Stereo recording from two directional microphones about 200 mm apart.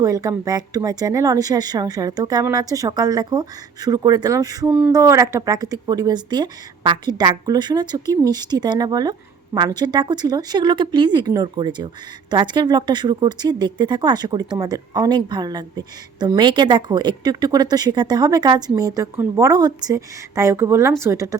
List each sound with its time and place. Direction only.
0.0 s speech: 15° right (ahead or behind)